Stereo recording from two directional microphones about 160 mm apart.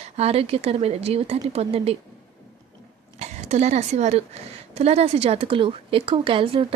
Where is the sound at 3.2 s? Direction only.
45° right (ahead or behind).